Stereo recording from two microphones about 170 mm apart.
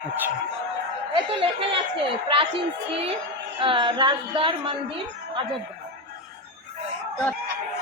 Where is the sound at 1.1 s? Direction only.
30° right (ahead or behind).